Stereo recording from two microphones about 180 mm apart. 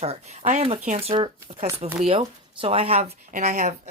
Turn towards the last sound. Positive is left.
turn(degrees=-40)  # may be behind; listen again after turning